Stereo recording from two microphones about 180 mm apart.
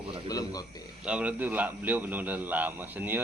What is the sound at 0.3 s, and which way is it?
Speech, 20° left (ahead or behind).